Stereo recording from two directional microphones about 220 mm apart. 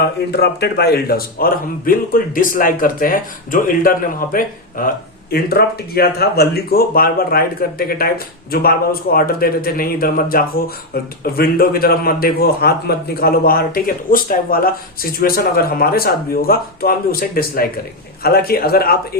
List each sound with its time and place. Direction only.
0.0 s a man's voice: 45° left (ahead or behind)